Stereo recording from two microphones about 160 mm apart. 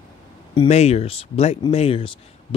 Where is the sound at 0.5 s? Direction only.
40° left (ahead or behind).